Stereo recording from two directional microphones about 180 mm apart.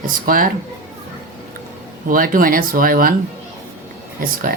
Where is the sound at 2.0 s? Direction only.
50° right (ahead or behind).